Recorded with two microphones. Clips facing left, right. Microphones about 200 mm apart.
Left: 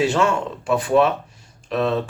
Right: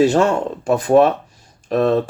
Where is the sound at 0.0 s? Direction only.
40° right (ahead or behind).